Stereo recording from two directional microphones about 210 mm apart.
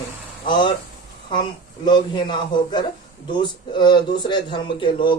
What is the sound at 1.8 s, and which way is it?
Speech, 20° left (ahead or behind).